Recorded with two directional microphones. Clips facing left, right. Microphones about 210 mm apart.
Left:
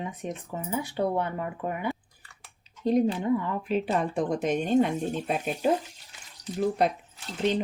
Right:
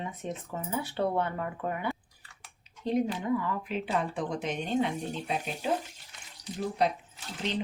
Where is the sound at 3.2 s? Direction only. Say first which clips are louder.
Left 3 dB; 25° left (ahead or behind).